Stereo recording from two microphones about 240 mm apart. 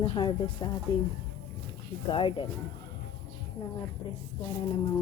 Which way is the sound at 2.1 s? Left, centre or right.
Left.